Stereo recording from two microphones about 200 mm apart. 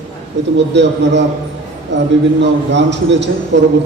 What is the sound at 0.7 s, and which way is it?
Speech, 60° right (ahead or behind).